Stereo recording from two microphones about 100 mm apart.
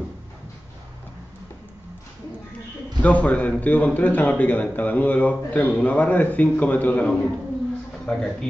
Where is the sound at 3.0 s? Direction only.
15° left (ahead or behind).